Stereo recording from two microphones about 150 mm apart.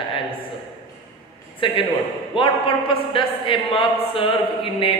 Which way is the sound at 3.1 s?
35° left (ahead or behind).